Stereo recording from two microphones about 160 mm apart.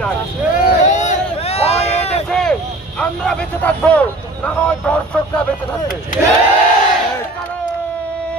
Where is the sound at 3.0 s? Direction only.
5° left (ahead or behind).